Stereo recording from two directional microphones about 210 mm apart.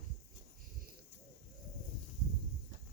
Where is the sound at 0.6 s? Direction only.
45° right (ahead or behind).